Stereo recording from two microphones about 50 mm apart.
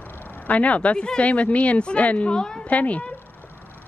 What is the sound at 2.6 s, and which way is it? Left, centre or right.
Speech, left.